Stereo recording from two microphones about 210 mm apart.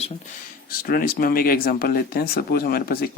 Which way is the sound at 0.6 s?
45° left (ahead or behind).